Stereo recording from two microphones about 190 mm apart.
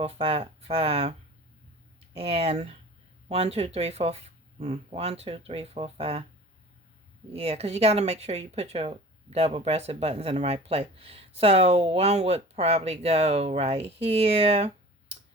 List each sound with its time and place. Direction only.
0.0 s speech: 30° right (ahead or behind)
2.1 s speech: 30° right (ahead or behind)
7.3 s speech: 30° right (ahead or behind)